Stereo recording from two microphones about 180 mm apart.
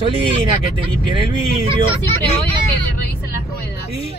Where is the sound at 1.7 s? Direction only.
30° right (ahead or behind).